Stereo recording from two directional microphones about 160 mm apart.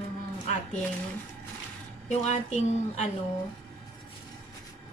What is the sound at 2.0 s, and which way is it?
A woman's voice, 45° left (ahead or behind).